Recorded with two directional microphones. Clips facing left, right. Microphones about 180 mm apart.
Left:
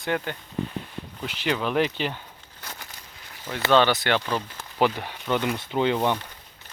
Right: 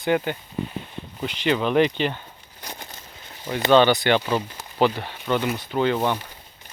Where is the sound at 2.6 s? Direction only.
20° right (ahead or behind).